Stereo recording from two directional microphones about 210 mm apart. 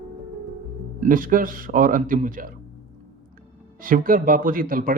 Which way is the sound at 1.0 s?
40° right (ahead or behind).